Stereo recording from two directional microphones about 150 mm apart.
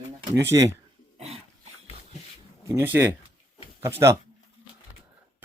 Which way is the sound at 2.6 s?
15° right (ahead or behind).